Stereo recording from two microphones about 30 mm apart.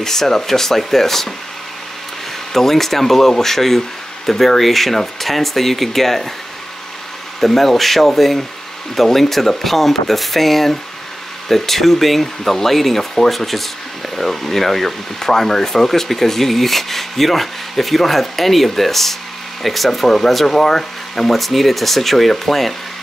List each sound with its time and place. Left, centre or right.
0.0 s speech: centre
2.5 s speech: centre
7.3 s speech: centre